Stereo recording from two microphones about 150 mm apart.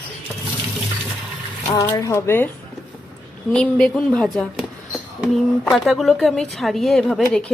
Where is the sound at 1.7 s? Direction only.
20° left (ahead or behind).